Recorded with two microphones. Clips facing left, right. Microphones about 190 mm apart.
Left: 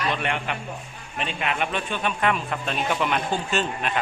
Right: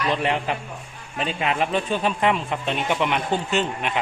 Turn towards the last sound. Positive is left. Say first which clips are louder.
# right 2 dB
turn(degrees=-20)  # may be behind; listen again after turning